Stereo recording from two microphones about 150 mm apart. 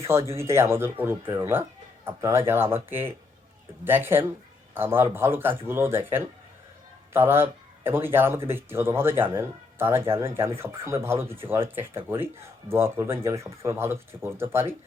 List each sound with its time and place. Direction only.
0.0 s a man's voice: 20° right (ahead or behind)